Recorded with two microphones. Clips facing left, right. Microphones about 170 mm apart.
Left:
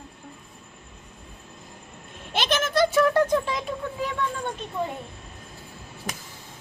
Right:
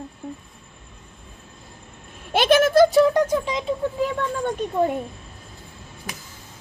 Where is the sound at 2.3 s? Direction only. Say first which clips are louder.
Right 9 dB; 50° right (ahead or behind).